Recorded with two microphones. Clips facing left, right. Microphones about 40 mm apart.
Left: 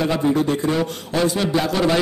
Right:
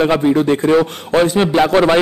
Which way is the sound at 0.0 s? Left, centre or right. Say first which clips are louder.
Right 6 dB; right.